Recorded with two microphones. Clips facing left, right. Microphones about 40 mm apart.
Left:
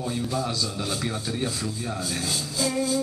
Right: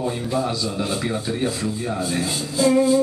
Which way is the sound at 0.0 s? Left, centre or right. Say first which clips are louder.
Right 5 dB; right.